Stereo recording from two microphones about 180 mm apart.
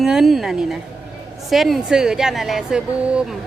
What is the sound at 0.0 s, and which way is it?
A woman's voice, centre (ahead or behind).